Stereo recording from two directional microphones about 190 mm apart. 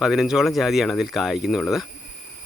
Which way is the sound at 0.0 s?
Centre (ahead or behind).